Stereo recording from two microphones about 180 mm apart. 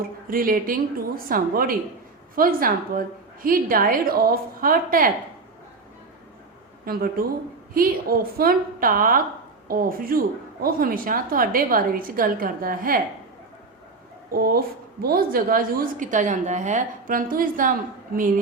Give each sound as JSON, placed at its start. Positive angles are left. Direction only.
{"t": 0.3, "sound": "a woman's voice", "side_deg": -50}
{"t": 6.8, "sound": "a woman's voice", "side_deg": -55}
{"t": 14.3, "sound": "a woman's voice", "side_deg": -55}